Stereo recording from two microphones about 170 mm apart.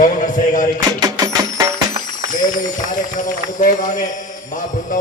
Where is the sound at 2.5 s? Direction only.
50° left (ahead or behind).